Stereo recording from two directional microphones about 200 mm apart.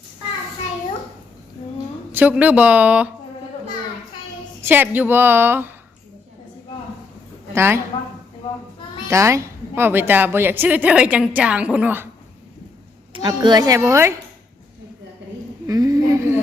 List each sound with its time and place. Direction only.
2.1 s a woman's voice: 10° right (ahead or behind)
4.6 s a woman's voice: 10° right (ahead or behind)
7.5 s a woman's voice: 10° right (ahead or behind)
9.0 s a woman's voice: 15° right (ahead or behind)
13.2 s a woman's voice: 20° right (ahead or behind)
15.6 s speech: 15° right (ahead or behind)